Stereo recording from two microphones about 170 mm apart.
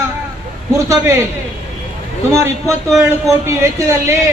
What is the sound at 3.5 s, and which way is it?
Speech, 15° right (ahead or behind).